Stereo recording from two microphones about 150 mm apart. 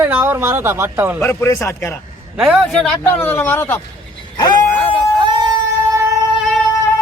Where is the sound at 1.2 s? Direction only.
15° left (ahead or behind).